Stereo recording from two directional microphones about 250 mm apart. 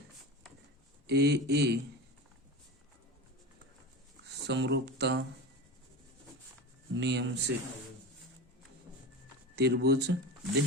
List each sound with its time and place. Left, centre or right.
1.0 s speech: right
4.4 s speech: right
6.9 s speech: right
9.6 s speech: right